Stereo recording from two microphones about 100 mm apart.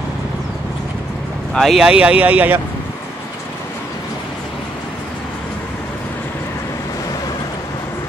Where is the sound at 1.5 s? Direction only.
5° right (ahead or behind).